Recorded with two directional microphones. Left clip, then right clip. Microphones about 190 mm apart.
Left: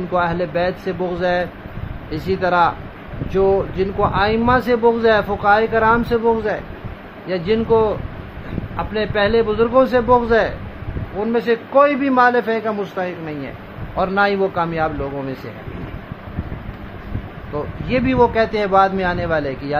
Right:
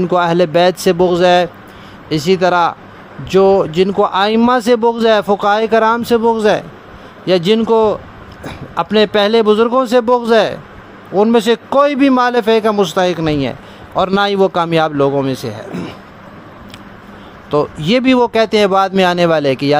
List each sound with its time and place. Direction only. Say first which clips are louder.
0.1 s speech: right 6 dB; 60° right (ahead or behind); by 2.7 s 45° right (ahead or behind)
3.3 s speech: right 7 dB; 55° right (ahead or behind)
11.1 s a man's voice: right 7 dB; 65° right (ahead or behind)
12.1 s speech: right 3 dB; 50° right (ahead or behind)
17.5 s speech: right 9 dB; 65° right (ahead or behind)